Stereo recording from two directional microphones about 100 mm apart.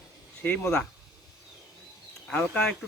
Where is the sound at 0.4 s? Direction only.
20° left (ahead or behind).